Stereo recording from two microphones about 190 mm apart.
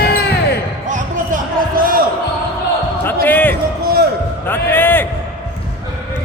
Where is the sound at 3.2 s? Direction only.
10° left (ahead or behind).